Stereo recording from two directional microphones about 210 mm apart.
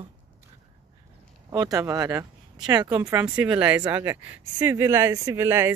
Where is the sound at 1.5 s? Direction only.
15° right (ahead or behind).